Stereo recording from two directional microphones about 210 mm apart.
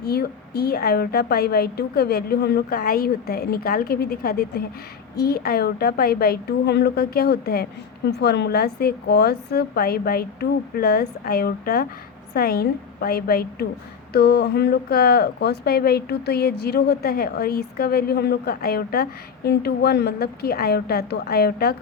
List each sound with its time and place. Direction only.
0.0 s a woman's voice: 50° left (ahead or behind)